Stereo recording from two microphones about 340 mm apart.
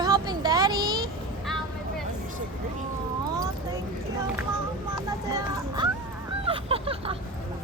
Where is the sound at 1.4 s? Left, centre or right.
Centre.